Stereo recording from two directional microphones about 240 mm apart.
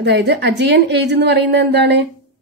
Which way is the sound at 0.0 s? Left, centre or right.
Right.